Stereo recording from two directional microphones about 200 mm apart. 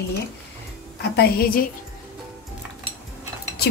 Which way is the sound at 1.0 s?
50° left (ahead or behind).